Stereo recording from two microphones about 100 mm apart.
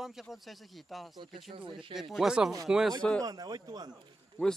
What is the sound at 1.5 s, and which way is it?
Speech, 55° right (ahead or behind).